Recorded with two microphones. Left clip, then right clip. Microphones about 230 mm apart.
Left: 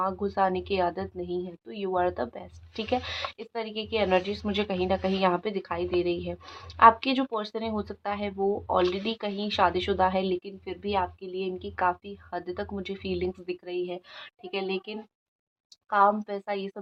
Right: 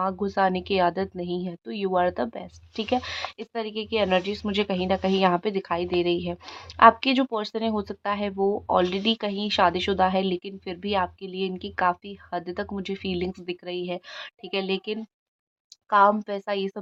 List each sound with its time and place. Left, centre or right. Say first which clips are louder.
0.0 s a woman's voice: right 2 dB; right